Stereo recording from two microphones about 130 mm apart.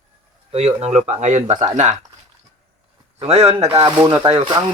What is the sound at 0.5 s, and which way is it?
Speech, 55° right (ahead or behind).